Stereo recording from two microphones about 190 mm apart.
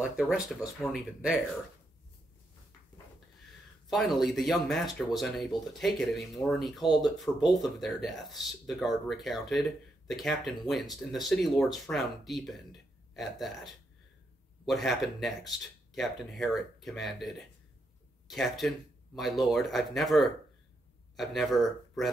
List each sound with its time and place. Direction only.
0.0 s speech: centre (ahead or behind)
3.9 s speech: centre (ahead or behind)
14.7 s speech: centre (ahead or behind)